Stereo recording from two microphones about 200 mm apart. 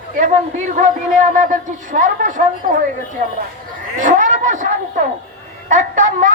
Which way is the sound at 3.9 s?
40° right (ahead or behind).